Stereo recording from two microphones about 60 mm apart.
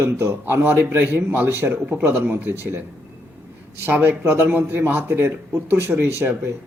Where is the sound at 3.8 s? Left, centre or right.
Right.